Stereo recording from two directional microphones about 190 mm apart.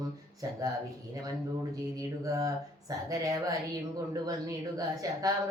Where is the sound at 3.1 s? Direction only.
20° right (ahead or behind).